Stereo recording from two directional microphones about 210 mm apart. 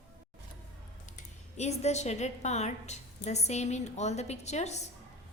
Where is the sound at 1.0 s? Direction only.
35° left (ahead or behind).